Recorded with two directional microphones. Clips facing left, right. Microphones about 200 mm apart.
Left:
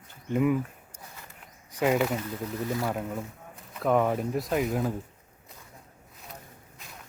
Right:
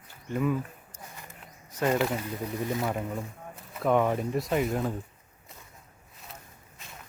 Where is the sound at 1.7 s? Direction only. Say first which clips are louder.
Left 2 dB; 15° left (ahead or behind).